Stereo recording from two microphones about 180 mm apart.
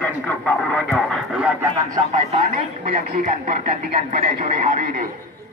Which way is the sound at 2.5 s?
55° right (ahead or behind).